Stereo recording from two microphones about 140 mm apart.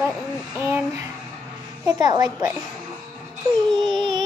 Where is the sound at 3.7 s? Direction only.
30° right (ahead or behind).